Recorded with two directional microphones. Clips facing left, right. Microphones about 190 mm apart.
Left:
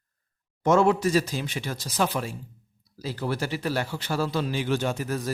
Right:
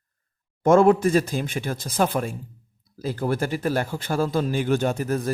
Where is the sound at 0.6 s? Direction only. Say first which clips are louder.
Right 4 dB; 50° right (ahead or behind).